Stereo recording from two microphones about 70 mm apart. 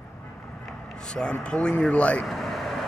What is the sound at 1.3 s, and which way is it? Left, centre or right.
Speech, centre.